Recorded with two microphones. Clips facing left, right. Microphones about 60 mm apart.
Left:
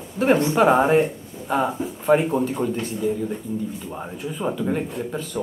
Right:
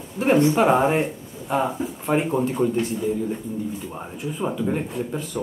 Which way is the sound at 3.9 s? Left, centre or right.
Centre.